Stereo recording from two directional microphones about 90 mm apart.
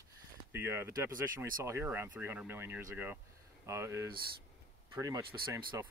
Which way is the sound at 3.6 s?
35° right (ahead or behind).